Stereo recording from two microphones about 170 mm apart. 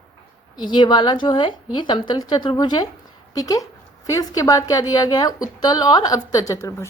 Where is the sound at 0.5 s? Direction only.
25° left (ahead or behind).